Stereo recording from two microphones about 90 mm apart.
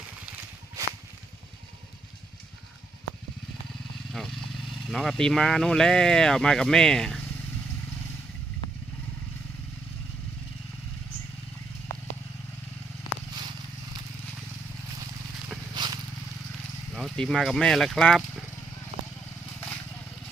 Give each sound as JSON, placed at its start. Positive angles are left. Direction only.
{"t": 4.1, "sound": "speech", "side_deg": 0}
{"t": 15.7, "sound": "vehicle", "side_deg": -55}
{"t": 16.9, "sound": "speech", "side_deg": 0}